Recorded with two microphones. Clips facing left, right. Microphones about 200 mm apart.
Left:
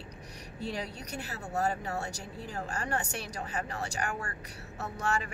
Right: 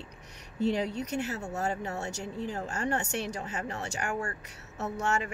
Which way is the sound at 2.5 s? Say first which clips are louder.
Right 1 dB; 25° right (ahead or behind).